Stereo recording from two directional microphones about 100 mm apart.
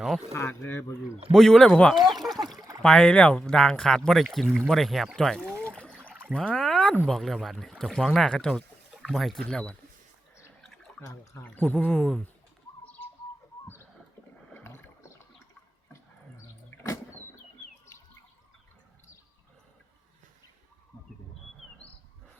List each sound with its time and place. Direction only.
0.3 s speech: 25° left (ahead or behind)
1.3 s speech: 5° left (ahead or behind)
10.6 s a sound: 5° left (ahead or behind)
11.4 s speech: 15° left (ahead or behind)
14.5 s rowboat: 20° left (ahead or behind)